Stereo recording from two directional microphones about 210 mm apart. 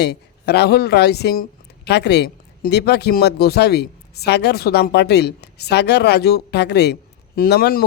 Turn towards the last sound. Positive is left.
turn(degrees=50)  # may be behind; listen again after turning